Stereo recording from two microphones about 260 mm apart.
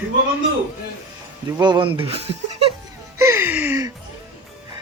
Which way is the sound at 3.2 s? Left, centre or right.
Centre.